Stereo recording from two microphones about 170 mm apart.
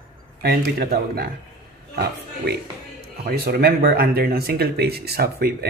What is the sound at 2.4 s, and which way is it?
Speech, 70° right (ahead or behind).